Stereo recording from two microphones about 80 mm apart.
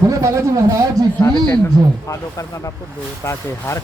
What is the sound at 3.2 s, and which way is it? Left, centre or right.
Speech, left.